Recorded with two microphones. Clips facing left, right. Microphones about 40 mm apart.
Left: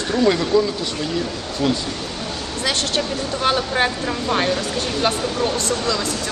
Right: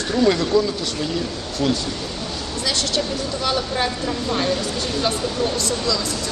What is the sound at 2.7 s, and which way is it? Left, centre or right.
Speech, left.